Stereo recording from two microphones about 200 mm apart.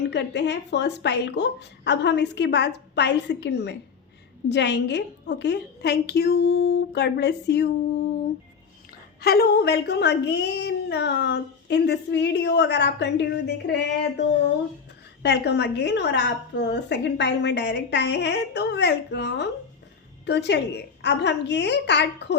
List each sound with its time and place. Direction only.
0.1 s a woman's voice: 60° left (ahead or behind)
9.2 s a woman's voice: 50° left (ahead or behind)
15.2 s a woman's voice: 60° left (ahead or behind)